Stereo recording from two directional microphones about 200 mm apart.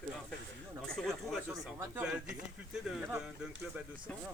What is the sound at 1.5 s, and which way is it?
Speech, 15° right (ahead or behind).